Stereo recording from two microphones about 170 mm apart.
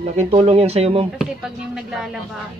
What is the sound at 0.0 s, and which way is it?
Speech, 40° right (ahead or behind).